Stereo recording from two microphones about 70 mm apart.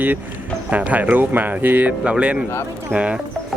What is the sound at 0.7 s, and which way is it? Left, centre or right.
Speech, right.